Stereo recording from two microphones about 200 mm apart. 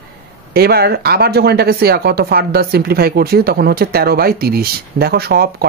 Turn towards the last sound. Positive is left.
turn(degrees=-50)  # may be behind; listen again after turning